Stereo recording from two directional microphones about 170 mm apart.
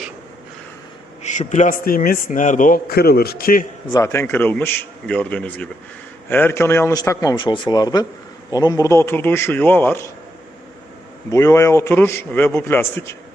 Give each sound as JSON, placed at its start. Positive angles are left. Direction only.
{"t": 1.2, "sound": "a man's voice", "side_deg": 45}
{"t": 3.9, "sound": "a man's voice", "side_deg": 15}
{"t": 11.3, "sound": "a man's voice", "side_deg": 15}